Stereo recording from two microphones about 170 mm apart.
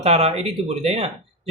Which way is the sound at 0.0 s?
40° right (ahead or behind).